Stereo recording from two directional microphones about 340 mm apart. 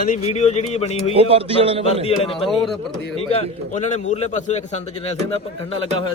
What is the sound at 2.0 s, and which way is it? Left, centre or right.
A man's voice, centre.